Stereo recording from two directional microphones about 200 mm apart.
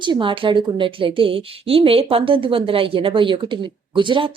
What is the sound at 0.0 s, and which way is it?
A woman's voice, 25° right (ahead or behind).